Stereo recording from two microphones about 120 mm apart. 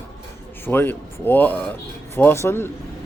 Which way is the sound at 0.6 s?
20° left (ahead or behind).